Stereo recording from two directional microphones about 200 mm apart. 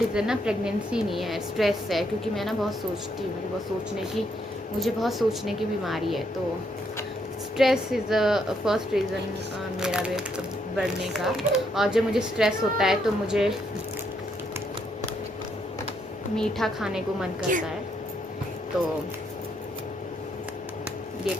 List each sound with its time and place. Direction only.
0.1 s speech: 5° right (ahead or behind)
4.8 s speech: centre (ahead or behind)
7.5 s speech: centre (ahead or behind)
16.3 s speech: centre (ahead or behind)
17.5 s a woman's voice: 40° right (ahead or behind)